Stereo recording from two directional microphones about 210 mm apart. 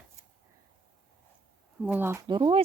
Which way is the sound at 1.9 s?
10° right (ahead or behind).